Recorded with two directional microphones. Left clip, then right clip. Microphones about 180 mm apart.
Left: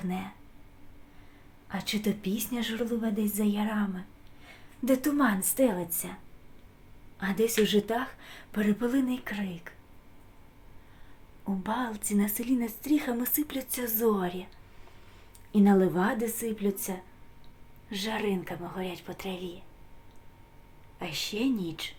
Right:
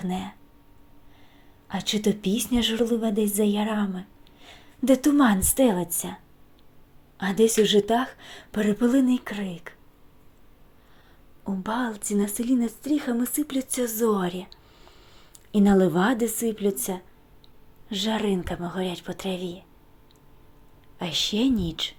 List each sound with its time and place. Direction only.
0.0 s a woman's voice: 30° right (ahead or behind)
1.6 s a woman's voice: 30° right (ahead or behind)
7.2 s a woman's voice: 35° right (ahead or behind)
11.4 s speech: 25° right (ahead or behind)
15.5 s a woman's voice: 30° right (ahead or behind)
21.0 s a woman's voice: 35° right (ahead or behind)